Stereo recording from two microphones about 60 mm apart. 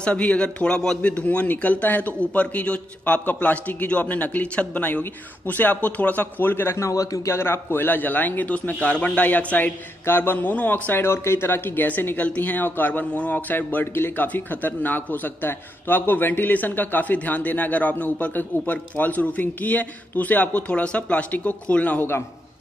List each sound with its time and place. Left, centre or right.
0.0 s a man's voice: centre
1.0 s speech: left
6.9 s a man's voice: left
7.3 s speech: left
8.7 s speech: centre
10.0 s speech: left
10.9 s speech: left